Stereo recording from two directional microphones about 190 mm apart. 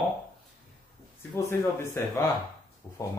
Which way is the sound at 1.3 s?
15° left (ahead or behind).